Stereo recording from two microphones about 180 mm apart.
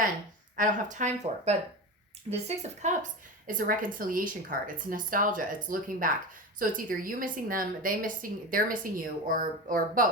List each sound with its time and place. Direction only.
0.5 s speech: 45° right (ahead or behind)